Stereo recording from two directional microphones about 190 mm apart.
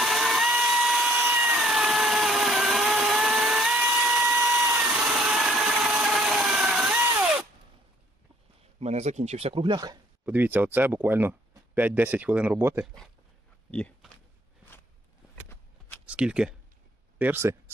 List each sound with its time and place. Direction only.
0.0 s tools: centre (ahead or behind)
8.8 s speech: 35° right (ahead or behind); by 10.0 s 20° right (ahead or behind)
10.2 s speech: 10° right (ahead or behind)
13.7 s a sound: 5° left (ahead or behind)
16.0 s speech: 5° right (ahead or behind)